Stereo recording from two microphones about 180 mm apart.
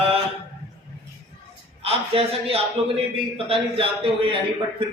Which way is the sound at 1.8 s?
35° right (ahead or behind).